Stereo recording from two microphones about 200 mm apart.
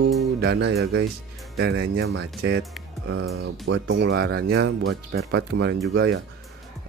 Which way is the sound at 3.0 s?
90° right.